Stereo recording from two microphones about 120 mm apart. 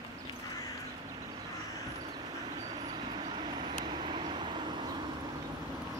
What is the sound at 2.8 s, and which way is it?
Vehicle, 45° right (ahead or behind).